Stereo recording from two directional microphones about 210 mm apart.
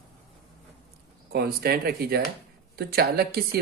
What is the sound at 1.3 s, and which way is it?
Speech, 50° right (ahead or behind).